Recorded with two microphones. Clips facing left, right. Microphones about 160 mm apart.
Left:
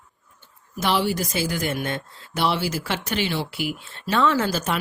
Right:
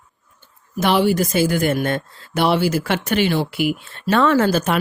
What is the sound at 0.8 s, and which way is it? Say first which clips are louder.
Speech: right 6 dB; 55° right (ahead or behind).